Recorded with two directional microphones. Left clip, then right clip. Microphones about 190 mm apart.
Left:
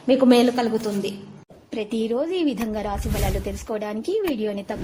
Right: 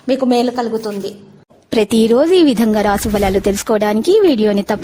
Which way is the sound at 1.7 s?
75° right (ahead or behind).